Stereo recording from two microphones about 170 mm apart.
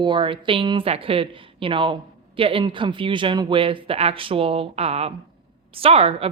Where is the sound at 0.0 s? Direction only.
30° right (ahead or behind).